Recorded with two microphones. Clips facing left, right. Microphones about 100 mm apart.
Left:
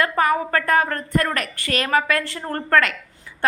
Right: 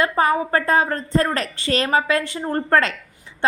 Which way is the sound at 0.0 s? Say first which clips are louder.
Right 1 dB; 25° right (ahead or behind).